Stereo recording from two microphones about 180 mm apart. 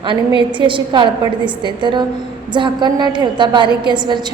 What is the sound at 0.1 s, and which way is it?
A woman's voice, 25° right (ahead or behind).